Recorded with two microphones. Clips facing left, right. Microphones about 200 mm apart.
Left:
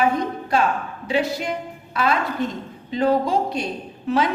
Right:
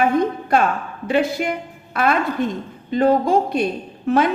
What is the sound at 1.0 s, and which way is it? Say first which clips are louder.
A woman's voice: right 4 dB; 55° right (ahead or behind).